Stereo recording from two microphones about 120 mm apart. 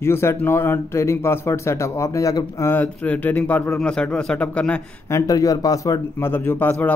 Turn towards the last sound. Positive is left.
turn(degrees=15)  # may be behind; listen again after turning